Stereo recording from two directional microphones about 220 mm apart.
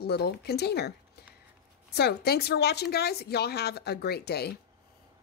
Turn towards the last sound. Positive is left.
turn(degrees=45)  # may be behind; listen again after turning